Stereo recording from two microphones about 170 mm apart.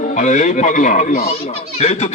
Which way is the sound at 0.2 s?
45° left (ahead or behind).